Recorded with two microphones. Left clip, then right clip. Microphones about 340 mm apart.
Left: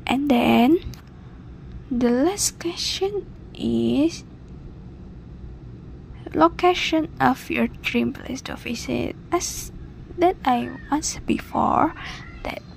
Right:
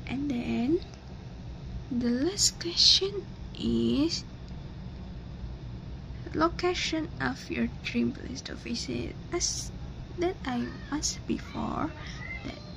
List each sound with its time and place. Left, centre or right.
0.0 s a sound: left
2.0 s speech: left
6.3 s speech: left